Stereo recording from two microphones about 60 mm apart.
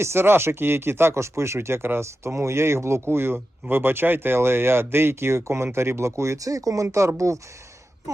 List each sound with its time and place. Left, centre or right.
0.0 s speech: right
6.8 s speech: right